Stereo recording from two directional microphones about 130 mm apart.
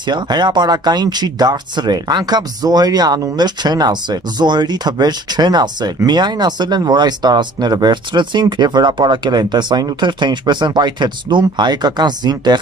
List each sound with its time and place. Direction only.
0.0 s speech: 35° right (ahead or behind)